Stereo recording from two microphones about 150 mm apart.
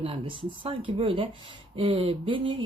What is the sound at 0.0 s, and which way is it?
Speech, 35° right (ahead or behind).